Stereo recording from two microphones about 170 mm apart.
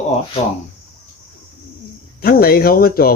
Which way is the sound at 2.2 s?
60° left (ahead or behind).